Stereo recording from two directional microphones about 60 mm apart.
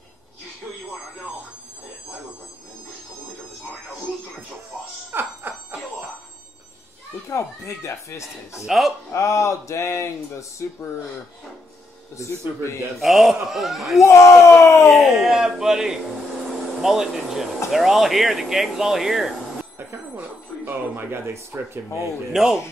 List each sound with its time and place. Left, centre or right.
5.1 s alarm clock: right
7.2 s speech: left
8.6 s speech: centre
9.1 s speech: left
13.0 s speech: centre
14.0 s speech: left
14.8 s speech: centre
19.6 s a sound: right
22.3 s speech: centre